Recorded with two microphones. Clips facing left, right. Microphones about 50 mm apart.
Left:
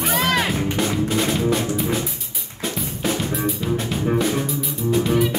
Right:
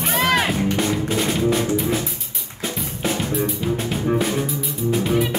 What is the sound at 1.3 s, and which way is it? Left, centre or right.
Music, centre.